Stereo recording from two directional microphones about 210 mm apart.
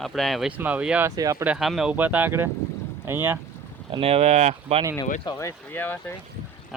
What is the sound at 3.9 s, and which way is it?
Speech, 30° right (ahead or behind).